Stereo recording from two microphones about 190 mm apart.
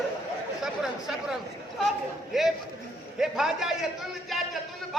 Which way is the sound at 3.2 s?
Centre (ahead or behind).